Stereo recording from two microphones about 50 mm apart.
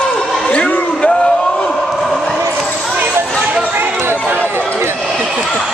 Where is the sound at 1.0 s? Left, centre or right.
Left.